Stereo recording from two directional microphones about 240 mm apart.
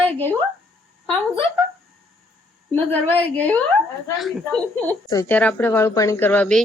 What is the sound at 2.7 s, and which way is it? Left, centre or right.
A woman's voice, centre.